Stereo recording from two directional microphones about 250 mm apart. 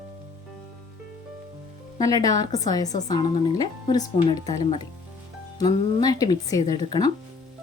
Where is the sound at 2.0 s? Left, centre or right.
Centre.